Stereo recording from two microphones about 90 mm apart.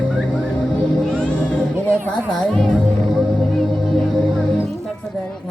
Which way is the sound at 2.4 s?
10° left (ahead or behind).